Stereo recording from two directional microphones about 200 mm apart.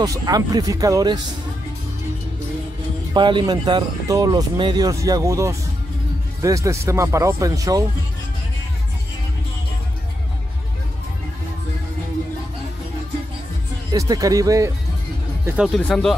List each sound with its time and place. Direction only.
0.0 s speech: 20° right (ahead or behind)
3.1 s speech: 25° right (ahead or behind)
13.9 s speech: 15° right (ahead or behind)
15.4 s speech: 5° right (ahead or behind)